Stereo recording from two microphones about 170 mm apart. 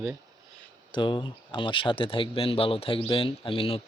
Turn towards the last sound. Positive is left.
turn(degrees=30)  # may be behind; listen again after turning